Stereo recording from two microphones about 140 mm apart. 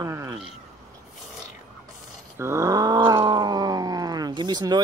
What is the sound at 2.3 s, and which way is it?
Groan, 20° right (ahead or behind).